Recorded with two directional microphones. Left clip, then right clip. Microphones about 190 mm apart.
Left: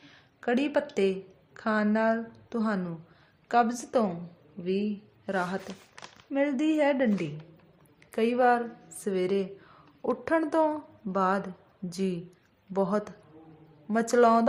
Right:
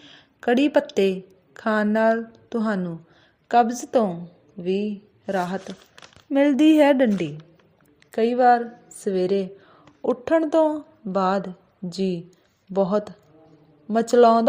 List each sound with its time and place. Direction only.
0.0 s a woman's voice: 35° right (ahead or behind)
6.3 s a woman's voice: 40° right (ahead or behind)
8.1 s a woman's voice: 25° right (ahead or behind)